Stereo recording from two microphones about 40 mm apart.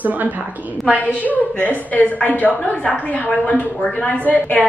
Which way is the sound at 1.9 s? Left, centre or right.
Left.